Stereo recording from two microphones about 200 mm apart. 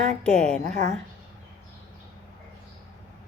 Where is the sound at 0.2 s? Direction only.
5° left (ahead or behind).